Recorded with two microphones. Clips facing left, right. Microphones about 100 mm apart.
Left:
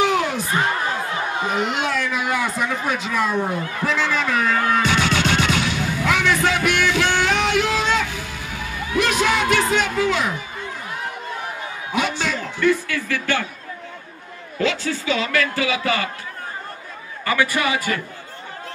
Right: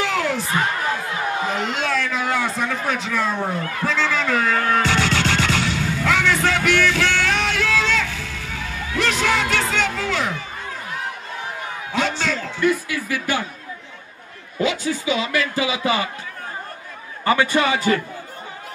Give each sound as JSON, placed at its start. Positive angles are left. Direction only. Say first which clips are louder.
{"t": 0.0, "sound": "a sound", "louder": "left 2 dB", "side_deg": 15}
{"t": 3.8, "sound": "music", "louder": "even", "side_deg": 15}
{"t": 11.9, "sound": "music", "louder": "even", "side_deg": 15}
{"t": 12.5, "sound": "speech", "louder": "left 2 dB", "side_deg": -15}
{"t": 14.6, "sound": "speech", "louder": "right 1 dB", "side_deg": -15}
{"t": 17.2, "sound": "speech", "louder": "right 3 dB", "side_deg": -25}